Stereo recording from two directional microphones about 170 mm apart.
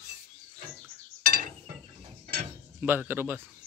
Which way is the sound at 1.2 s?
60° right (ahead or behind).